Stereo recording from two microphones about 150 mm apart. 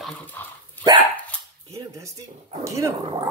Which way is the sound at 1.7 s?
20° right (ahead or behind).